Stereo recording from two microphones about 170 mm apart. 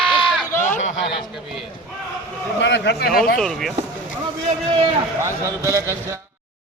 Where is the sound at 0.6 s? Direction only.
45° left (ahead or behind).